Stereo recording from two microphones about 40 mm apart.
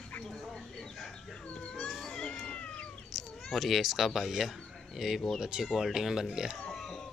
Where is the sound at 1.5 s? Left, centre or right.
Left.